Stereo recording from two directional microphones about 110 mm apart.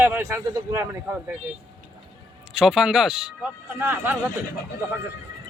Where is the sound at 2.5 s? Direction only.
5° right (ahead or behind).